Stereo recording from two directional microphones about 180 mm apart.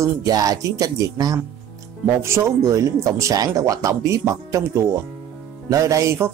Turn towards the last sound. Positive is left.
turn(degrees=-15)  # may be behind; listen again after turning